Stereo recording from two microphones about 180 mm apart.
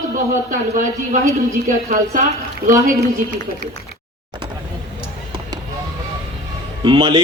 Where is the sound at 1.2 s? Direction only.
15° right (ahead or behind).